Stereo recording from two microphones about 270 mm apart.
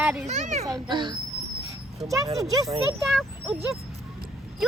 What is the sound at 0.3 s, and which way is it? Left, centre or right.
Speech, right.